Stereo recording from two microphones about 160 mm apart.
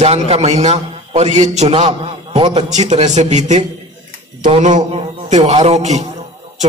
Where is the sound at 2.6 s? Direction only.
45° right (ahead or behind).